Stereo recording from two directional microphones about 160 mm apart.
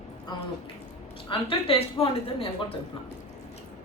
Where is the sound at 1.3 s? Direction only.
35° left (ahead or behind).